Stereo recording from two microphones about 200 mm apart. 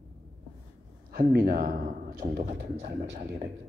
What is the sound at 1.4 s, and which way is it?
Speech, 45° right (ahead or behind).